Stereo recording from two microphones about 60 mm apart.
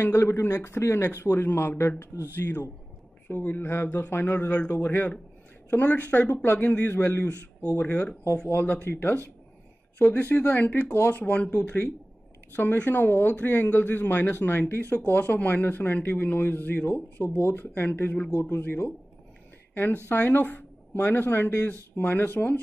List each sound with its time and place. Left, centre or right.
0.0 s speech: left
4.5 s speech: centre
8.5 s speech: left